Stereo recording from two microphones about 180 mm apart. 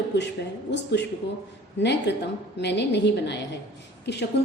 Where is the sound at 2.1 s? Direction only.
70° left (ahead or behind).